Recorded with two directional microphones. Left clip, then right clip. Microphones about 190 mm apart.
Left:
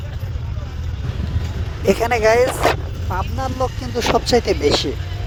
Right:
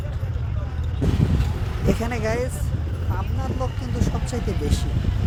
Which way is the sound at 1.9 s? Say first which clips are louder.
Left 11 dB; 55° left (ahead or behind).